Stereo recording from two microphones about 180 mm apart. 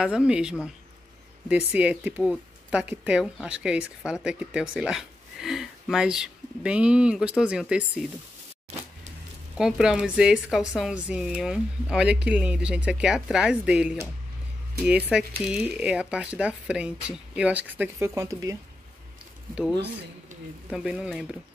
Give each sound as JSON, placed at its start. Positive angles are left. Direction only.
{"t": 0.0, "sound": "speech", "side_deg": -5}
{"t": 9.6, "sound": "speech", "side_deg": -5}
{"t": 20.7, "sound": "speech", "side_deg": -5}